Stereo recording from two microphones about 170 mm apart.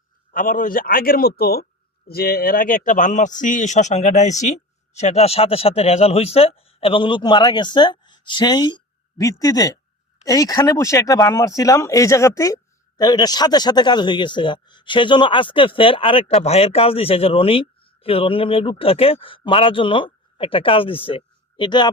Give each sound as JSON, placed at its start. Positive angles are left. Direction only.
{"t": 0.3, "sound": "a man's voice", "side_deg": 50}